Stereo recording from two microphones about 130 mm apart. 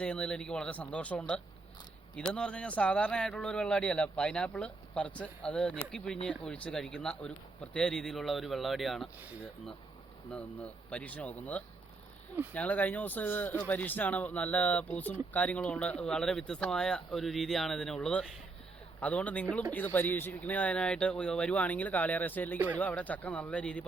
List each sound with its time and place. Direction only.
0.0 s speech: 5° left (ahead or behind)
10.3 s speech: 10° left (ahead or behind)